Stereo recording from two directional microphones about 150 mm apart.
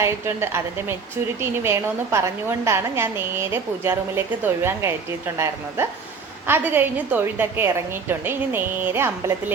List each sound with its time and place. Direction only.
0.0 s a woman's voice: 15° right (ahead or behind)